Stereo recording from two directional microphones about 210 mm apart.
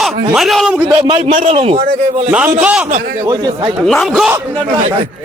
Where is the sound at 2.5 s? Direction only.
5° right (ahead or behind).